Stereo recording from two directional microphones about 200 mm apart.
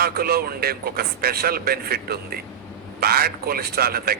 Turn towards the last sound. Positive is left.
turn(degrees=-50)  # may be behind; listen again after turning